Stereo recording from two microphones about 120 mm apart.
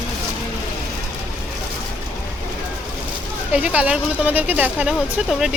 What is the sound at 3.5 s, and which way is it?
Speech, 10° right (ahead or behind).